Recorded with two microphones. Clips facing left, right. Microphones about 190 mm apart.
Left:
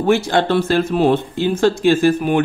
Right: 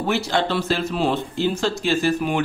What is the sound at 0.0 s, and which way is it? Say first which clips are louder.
Speech: left 6 dB; 50° left (ahead or behind).